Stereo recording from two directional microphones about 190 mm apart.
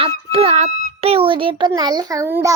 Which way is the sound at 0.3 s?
30° right (ahead or behind).